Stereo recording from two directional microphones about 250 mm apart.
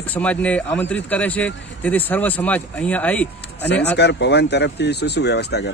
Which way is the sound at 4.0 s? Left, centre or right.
Left.